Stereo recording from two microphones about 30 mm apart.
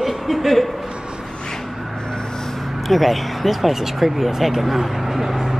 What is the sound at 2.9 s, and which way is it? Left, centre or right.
Speech, centre.